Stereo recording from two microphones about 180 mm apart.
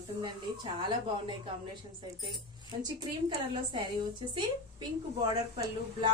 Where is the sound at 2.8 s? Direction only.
20° right (ahead or behind).